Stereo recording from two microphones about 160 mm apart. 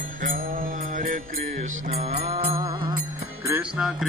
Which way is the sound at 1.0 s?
65° right (ahead or behind).